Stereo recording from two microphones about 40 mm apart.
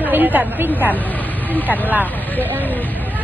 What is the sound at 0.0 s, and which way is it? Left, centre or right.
Speech, right.